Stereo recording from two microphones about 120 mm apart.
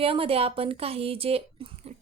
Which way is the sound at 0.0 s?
50° right (ahead or behind).